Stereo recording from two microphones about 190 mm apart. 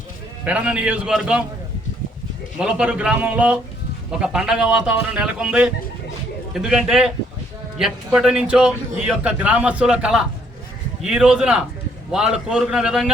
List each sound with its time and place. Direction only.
0.4 s a man's voice: 5° right (ahead or behind)
2.6 s a man's voice: 5° right (ahead or behind)